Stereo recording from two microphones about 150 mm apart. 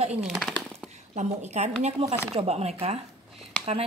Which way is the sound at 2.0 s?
40° right (ahead or behind).